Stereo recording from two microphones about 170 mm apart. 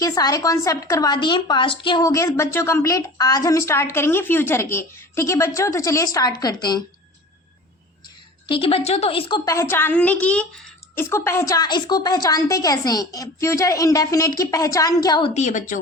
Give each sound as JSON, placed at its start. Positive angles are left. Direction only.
{"t": 0.0, "sound": "a woman's voice", "side_deg": 20}
{"t": 8.4, "sound": "a woman's voice", "side_deg": 30}
{"t": 9.4, "sound": "a woman's voice", "side_deg": 15}
{"t": 15.3, "sound": "speech", "side_deg": 45}